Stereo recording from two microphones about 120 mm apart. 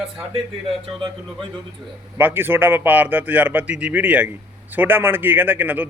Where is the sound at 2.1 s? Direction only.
15° right (ahead or behind).